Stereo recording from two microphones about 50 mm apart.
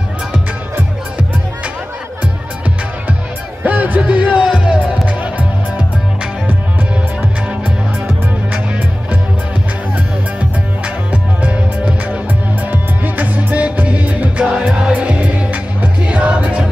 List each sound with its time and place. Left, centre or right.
3.6 s music: right
4.5 s music: centre
5.0 s music: right
11.1 s music: right